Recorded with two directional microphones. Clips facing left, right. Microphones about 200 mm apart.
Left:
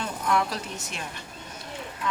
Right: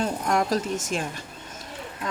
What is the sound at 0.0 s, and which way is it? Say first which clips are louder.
Speech: right 2 dB; 45° right (ahead or behind).